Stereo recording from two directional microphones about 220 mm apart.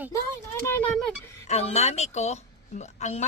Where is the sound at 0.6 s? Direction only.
5° left (ahead or behind).